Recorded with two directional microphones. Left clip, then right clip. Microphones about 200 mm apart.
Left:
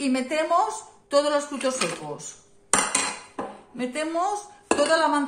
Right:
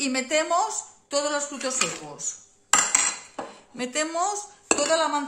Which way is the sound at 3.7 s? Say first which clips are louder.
Even; 35° right (ahead or behind).